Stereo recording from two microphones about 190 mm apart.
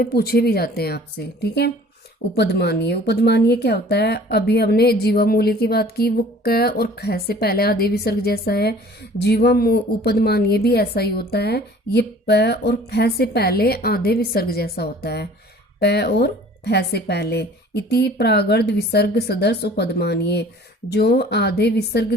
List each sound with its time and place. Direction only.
0.0 s a woman's voice: 55° left (ahead or behind)